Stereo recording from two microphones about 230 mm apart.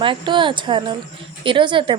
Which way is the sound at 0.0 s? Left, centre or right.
Right.